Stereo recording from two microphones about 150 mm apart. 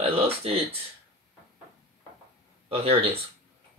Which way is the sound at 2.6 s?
40° right (ahead or behind).